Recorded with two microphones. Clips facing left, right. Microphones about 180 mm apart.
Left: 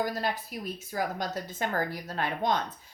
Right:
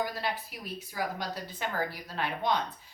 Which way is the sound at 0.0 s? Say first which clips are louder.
Left 3 dB; 45° left (ahead or behind).